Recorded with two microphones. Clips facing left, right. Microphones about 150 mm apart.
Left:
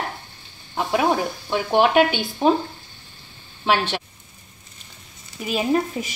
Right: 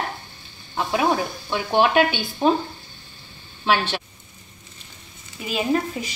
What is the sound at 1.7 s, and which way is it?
Speech, 15° left (ahead or behind).